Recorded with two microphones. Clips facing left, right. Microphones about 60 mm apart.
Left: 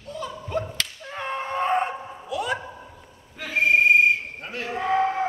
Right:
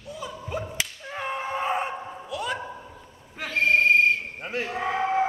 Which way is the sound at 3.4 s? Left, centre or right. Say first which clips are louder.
Left 2 dB; centre.